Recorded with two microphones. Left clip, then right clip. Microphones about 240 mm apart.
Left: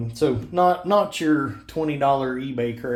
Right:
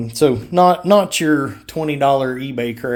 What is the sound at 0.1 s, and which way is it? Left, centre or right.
Speech, right.